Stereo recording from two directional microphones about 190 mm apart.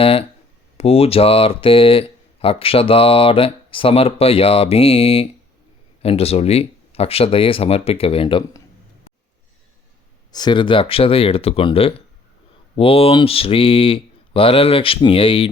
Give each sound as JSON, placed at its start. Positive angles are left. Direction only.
{"t": 0.0, "sound": "speech", "side_deg": 30}
{"t": 10.3, "sound": "speech", "side_deg": 25}